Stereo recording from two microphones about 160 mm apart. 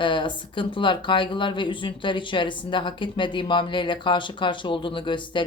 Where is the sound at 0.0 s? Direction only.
30° left (ahead or behind).